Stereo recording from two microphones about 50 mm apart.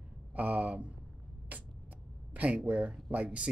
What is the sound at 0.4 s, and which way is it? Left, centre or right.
Speech, right.